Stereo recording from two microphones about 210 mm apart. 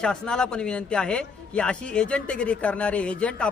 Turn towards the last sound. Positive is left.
turn(degrees=5)  # may be behind; listen again after turning